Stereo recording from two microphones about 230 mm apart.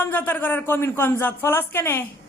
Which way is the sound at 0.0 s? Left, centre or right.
Centre.